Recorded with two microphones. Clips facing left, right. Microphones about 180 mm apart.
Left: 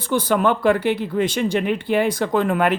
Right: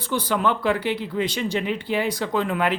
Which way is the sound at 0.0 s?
50° left (ahead or behind).